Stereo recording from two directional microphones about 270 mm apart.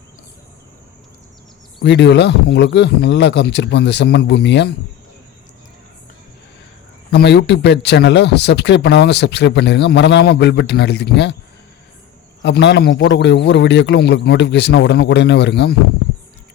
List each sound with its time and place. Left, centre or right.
1.8 s speech: left
7.1 s speech: left
12.4 s speech: left